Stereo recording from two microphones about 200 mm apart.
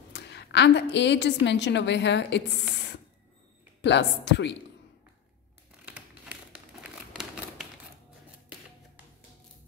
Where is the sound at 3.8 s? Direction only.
60° left (ahead or behind).